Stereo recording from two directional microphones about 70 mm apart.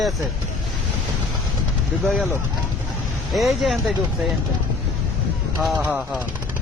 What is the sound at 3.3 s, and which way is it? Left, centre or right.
Speech, centre.